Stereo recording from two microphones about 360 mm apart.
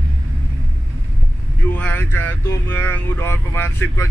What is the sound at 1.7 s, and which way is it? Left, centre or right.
Speech, centre.